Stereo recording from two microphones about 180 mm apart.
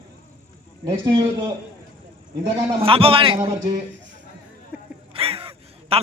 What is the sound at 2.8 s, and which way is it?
A man's voice, 30° right (ahead or behind).